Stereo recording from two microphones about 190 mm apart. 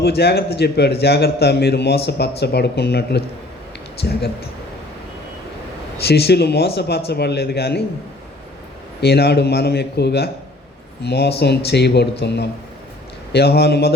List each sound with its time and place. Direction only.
0.0 s a man's voice: 60° left (ahead or behind)
6.0 s a man's voice: 60° left (ahead or behind)
9.0 s a man's voice: 60° left (ahead or behind)